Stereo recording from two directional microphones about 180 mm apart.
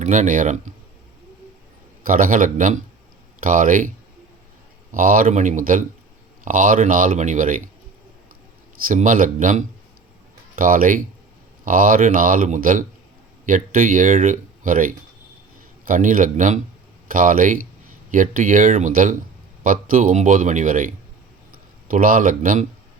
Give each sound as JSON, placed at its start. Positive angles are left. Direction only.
{"t": 0.0, "sound": "speech", "side_deg": -40}
{"t": 2.0, "sound": "speech", "side_deg": -50}
{"t": 8.9, "sound": "speech", "side_deg": -45}